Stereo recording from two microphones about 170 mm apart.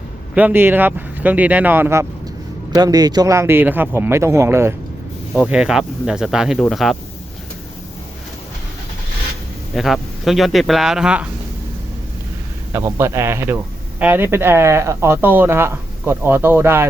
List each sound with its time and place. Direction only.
0.3 s speech: 10° right (ahead or behind)
9.7 s speech: centre (ahead or behind)
12.7 s speech: 15° right (ahead or behind)